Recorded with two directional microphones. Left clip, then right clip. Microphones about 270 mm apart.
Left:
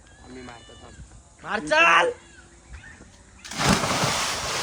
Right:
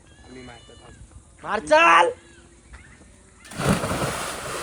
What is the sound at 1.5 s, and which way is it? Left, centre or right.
Speech, centre.